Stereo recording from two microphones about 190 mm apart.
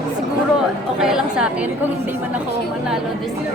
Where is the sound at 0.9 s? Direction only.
5° right (ahead or behind).